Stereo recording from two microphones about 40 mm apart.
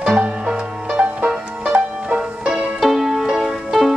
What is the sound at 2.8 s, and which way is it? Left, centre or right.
Music, centre.